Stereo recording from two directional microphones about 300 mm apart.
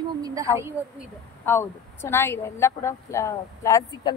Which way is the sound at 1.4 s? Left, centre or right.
Centre.